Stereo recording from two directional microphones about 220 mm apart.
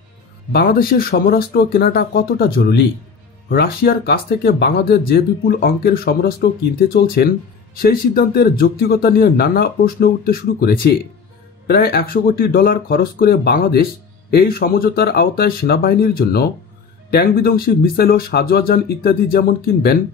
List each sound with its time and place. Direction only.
0.5 s speech: 45° left (ahead or behind)